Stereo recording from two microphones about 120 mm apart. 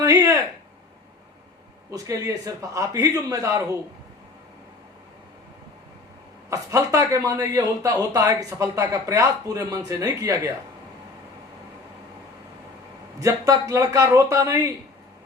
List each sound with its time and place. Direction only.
0.0 s a sound: 30° right (ahead or behind)
1.9 s a man's voice: 30° right (ahead or behind)
6.5 s a man's voice: 25° right (ahead or behind)
13.1 s a man's voice: 30° right (ahead or behind)